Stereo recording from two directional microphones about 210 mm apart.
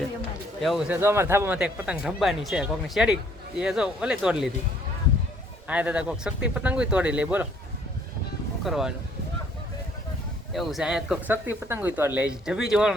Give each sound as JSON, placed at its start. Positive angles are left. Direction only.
{"t": 0.6, "sound": "speech", "side_deg": 0}
{"t": 5.6, "sound": "speech", "side_deg": -5}
{"t": 8.6, "sound": "speech", "side_deg": 0}
{"t": 10.5, "sound": "speech", "side_deg": 0}